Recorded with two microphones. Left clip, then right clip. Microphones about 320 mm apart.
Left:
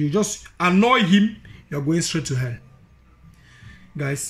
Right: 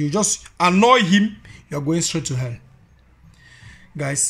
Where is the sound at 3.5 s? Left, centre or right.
Centre.